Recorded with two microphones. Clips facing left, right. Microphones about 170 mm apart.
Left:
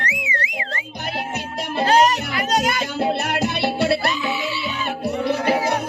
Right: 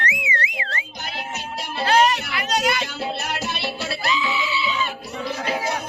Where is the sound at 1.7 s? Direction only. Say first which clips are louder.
Left 2 dB; 40° left (ahead or behind); by 5.8 s 60° left (ahead or behind).